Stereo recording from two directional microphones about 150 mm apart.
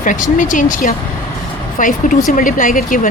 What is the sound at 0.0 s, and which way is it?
Speech, 60° left (ahead or behind).